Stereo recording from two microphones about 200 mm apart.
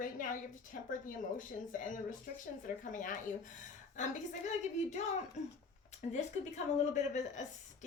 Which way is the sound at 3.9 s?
35° left (ahead or behind).